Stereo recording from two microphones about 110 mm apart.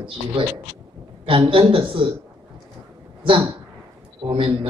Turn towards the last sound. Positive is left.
turn(degrees=-50)  # may be behind; listen again after turning